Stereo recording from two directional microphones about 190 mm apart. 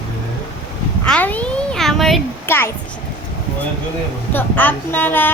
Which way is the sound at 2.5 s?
10° left (ahead or behind).